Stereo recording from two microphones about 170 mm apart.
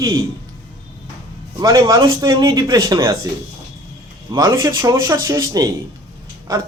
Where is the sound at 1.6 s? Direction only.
20° right (ahead or behind).